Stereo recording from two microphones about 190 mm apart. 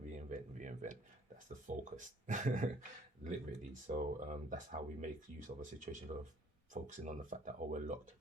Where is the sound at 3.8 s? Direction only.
40° right (ahead or behind).